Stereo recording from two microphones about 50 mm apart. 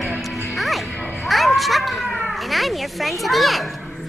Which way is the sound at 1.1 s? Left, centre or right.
Centre.